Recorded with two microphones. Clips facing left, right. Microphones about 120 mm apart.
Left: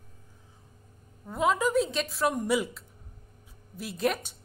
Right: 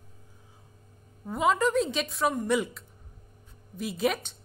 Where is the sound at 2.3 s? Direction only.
10° left (ahead or behind).